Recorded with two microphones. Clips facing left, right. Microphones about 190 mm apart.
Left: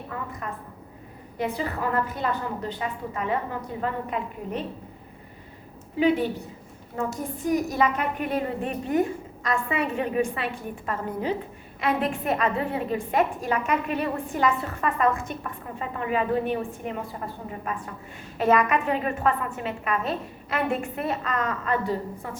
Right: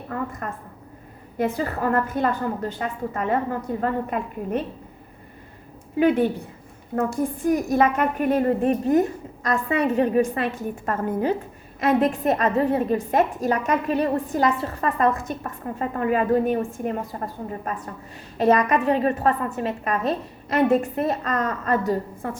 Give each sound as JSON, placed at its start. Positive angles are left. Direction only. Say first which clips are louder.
{"t": 0.4, "sound": "a woman's voice", "louder": "right 2 dB", "side_deg": -45}
{"t": 6.0, "sound": "a woman's voice", "louder": "right 3 dB", "side_deg": -50}